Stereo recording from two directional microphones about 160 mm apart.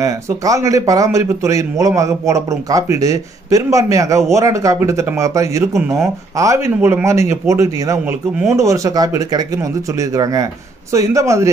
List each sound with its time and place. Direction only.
0.0 s a man's voice: 20° right (ahead or behind)